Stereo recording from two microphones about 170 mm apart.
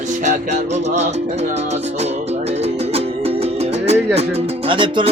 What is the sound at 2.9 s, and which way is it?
Music, 35° right (ahead or behind).